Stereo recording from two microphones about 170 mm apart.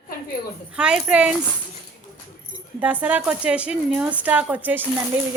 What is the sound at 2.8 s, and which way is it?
Speech, 10° right (ahead or behind).